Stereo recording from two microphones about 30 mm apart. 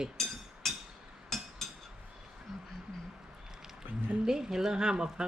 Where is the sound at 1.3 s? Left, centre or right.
Centre.